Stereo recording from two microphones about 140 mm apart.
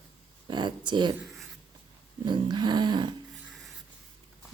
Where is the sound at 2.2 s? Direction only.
30° right (ahead or behind).